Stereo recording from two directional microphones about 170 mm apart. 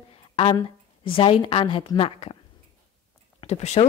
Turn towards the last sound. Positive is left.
turn(degrees=40)  # may be behind; listen again after turning